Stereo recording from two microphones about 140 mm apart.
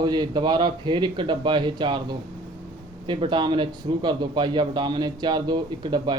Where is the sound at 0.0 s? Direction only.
30° right (ahead or behind).